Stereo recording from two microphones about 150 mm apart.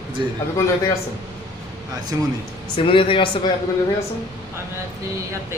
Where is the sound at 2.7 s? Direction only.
35° left (ahead or behind).